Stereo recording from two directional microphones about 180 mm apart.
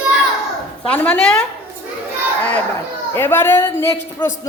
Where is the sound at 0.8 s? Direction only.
10° left (ahead or behind).